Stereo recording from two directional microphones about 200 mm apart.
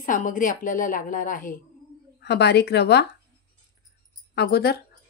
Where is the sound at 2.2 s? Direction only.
55° left (ahead or behind).